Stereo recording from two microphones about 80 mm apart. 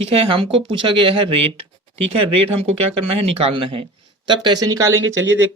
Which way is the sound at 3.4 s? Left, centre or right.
Right.